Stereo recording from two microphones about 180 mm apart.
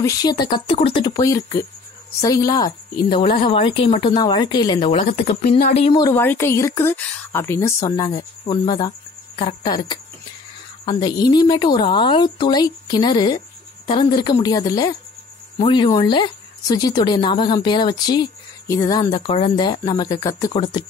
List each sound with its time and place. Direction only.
0.0 s speech: 20° left (ahead or behind); by 5.9 s 35° left (ahead or behind)
5.9 s speech: 15° left (ahead or behind)
19.1 s speech: 30° left (ahead or behind)